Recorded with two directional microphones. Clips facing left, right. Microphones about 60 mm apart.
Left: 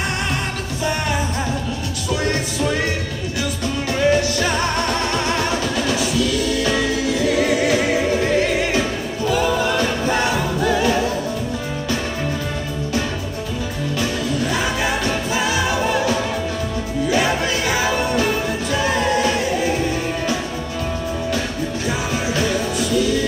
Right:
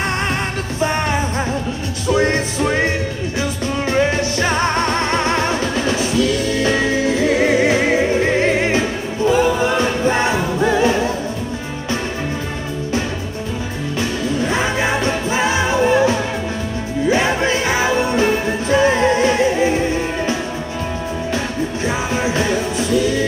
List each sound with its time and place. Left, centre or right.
0.7 s music: right
2.1 s music: right
6.6 s music: right
13.9 s music: right
21.8 s music: right